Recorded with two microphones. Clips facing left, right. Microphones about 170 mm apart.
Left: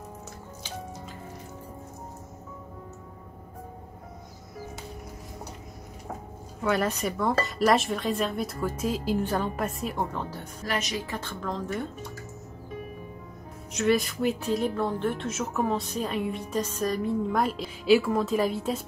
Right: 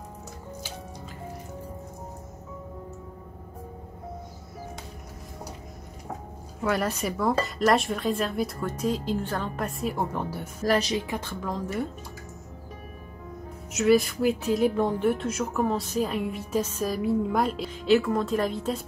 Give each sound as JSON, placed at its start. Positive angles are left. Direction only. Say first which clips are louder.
{"t": 6.6, "sound": "a woman's voice", "louder": "even", "side_deg": 0}
{"t": 9.6, "sound": "a woman's voice", "louder": "right 1 dB", "side_deg": 0}
{"t": 10.6, "sound": "a woman's voice", "louder": "right 7 dB", "side_deg": -35}
{"t": 11.1, "sound": "a woman's voice", "louder": "right 1 dB", "side_deg": -10}
{"t": 13.7, "sound": "a woman's voice", "louder": "right 3 dB", "side_deg": 0}